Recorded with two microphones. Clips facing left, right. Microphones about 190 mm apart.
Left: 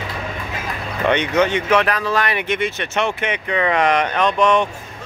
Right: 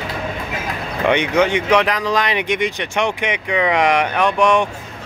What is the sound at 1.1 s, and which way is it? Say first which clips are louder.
Speech: right 1 dB; 10° right (ahead or behind).